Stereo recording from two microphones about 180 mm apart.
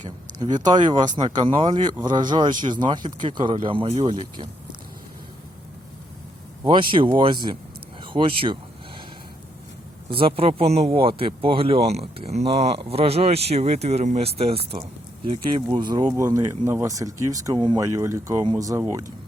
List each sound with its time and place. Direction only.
0.0 s speech: 40° right (ahead or behind)
0.9 s speech: 25° right (ahead or behind)
6.7 s speech: 25° right (ahead or behind)
10.1 s speech: 30° right (ahead or behind)